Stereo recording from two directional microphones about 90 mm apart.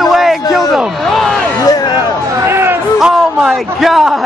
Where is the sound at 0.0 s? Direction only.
Centre (ahead or behind).